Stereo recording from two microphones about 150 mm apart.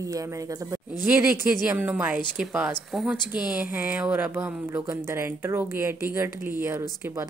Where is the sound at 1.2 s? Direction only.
10° right (ahead or behind).